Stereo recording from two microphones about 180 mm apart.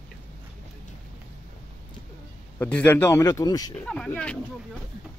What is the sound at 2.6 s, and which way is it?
A man's voice, 10° left (ahead or behind).